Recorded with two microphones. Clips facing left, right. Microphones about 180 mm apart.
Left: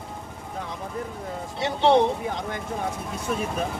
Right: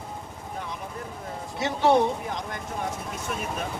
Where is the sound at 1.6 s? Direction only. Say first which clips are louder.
Left 2 dB; 30° left (ahead or behind).